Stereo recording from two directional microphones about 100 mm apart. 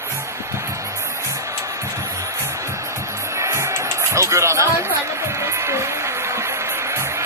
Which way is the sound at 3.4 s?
30° right (ahead or behind).